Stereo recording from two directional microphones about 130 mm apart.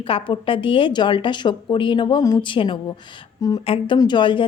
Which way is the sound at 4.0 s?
35° left (ahead or behind).